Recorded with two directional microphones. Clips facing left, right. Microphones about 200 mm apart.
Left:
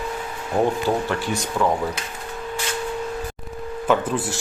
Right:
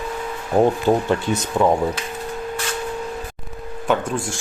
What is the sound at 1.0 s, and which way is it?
Speech, 20° right (ahead or behind).